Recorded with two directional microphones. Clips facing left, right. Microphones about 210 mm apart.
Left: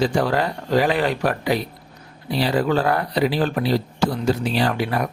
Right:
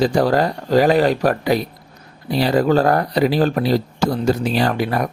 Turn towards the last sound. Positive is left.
turn(degrees=-45)  # may be behind; listen again after turning